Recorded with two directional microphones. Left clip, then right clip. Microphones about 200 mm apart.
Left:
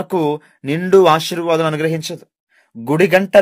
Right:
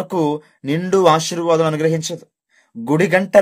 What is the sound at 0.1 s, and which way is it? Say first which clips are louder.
Speech: left 2 dB; 35° left (ahead or behind).